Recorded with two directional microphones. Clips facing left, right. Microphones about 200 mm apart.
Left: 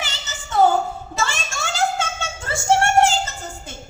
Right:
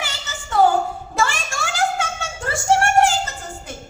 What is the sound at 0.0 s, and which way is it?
Child singing, 20° left (ahead or behind).